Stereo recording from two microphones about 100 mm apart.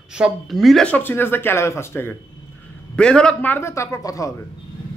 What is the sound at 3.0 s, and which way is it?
Speech, 10° left (ahead or behind).